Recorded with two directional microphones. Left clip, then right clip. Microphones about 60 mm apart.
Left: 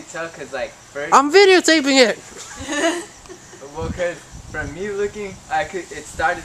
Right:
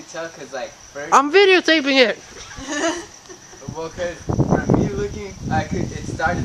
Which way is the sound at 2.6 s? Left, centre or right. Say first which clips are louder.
Left 2 dB; right.